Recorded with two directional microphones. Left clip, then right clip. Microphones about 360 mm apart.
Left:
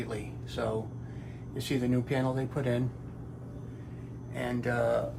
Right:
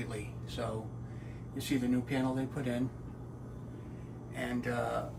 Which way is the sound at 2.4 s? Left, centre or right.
Left.